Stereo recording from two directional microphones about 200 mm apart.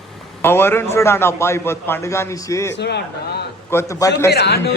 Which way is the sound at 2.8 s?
55° left (ahead or behind).